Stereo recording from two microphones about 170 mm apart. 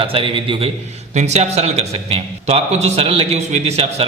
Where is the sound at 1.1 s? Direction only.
40° right (ahead or behind).